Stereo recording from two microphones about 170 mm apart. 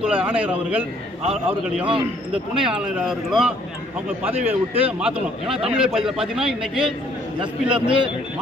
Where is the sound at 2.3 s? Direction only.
5° right (ahead or behind).